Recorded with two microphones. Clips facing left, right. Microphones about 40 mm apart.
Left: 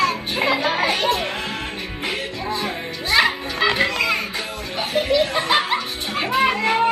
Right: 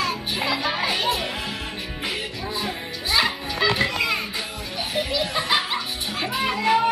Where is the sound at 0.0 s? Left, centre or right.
Left.